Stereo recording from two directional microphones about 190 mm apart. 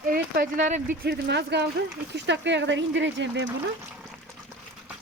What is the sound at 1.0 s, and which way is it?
Speech, 60° right (ahead or behind).